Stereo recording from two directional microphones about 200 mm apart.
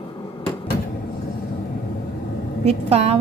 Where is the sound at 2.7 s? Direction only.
30° right (ahead or behind).